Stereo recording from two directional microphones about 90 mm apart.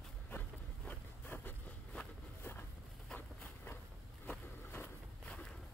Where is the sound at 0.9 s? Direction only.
20° left (ahead or behind).